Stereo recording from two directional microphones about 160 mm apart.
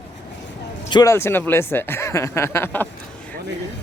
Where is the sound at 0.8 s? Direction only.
30° left (ahead or behind).